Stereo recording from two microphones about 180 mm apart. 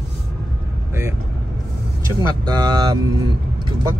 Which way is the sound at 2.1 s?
20° right (ahead or behind).